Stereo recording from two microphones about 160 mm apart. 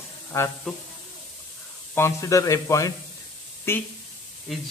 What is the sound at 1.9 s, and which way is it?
Speech, 15° left (ahead or behind).